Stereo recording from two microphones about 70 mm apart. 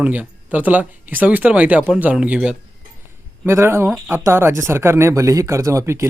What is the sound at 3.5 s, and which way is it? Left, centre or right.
Speech, right.